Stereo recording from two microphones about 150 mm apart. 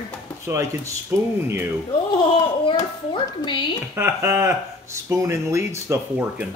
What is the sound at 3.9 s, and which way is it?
Speech, 15° right (ahead or behind).